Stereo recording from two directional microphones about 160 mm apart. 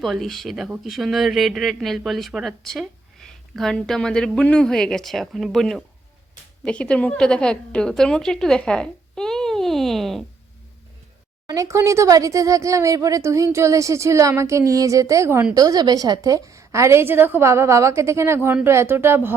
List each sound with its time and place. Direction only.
0.0 s speech: centre (ahead or behind)
11.4 s a woman's voice: 20° right (ahead or behind)